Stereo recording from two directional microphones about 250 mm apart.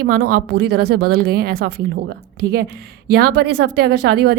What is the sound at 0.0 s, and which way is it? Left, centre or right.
A woman's voice, right.